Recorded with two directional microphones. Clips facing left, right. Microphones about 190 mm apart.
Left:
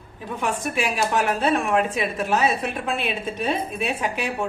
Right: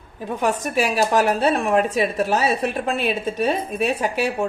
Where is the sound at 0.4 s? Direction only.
40° right (ahead or behind).